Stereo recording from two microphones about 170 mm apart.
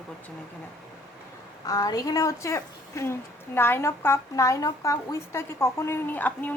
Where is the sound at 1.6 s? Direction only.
20° left (ahead or behind).